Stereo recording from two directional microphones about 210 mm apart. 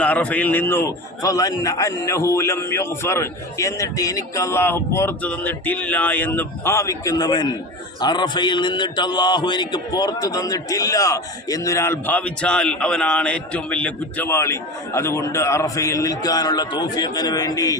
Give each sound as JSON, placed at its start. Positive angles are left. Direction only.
{"t": 0.0, "sound": "speech", "side_deg": 5}